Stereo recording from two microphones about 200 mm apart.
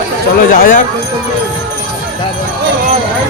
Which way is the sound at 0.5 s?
45° left (ahead or behind).